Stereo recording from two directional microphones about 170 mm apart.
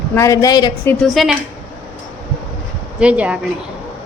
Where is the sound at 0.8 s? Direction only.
Centre (ahead or behind).